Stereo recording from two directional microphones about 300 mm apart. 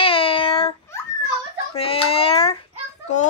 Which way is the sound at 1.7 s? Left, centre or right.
Centre.